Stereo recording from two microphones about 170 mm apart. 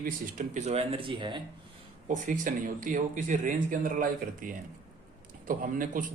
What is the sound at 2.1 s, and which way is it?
A man's voice, 50° right (ahead or behind).